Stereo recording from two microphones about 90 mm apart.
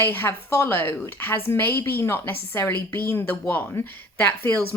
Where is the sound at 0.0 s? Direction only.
25° left (ahead or behind).